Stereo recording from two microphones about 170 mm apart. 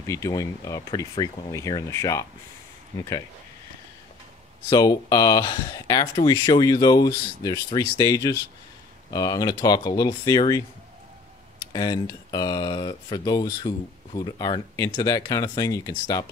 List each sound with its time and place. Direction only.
0.0 s speech: 20° left (ahead or behind)
4.6 s speech: 20° left (ahead or behind)
11.7 s speech: 25° left (ahead or behind)